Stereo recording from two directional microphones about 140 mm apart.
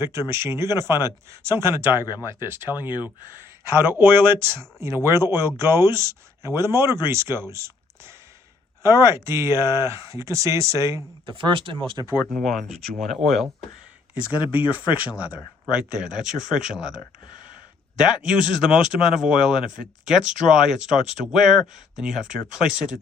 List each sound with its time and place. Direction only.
0.0 s speech: 20° right (ahead or behind)
3.8 s speech: 15° right (ahead or behind)
11.3 s speech: 35° right (ahead or behind)
12.3 s speech: centre (ahead or behind)
14.3 s speech: 10° right (ahead or behind)
18.3 s speech: 5° right (ahead or behind)